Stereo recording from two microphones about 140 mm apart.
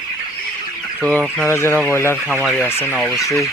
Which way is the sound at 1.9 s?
20° left (ahead or behind).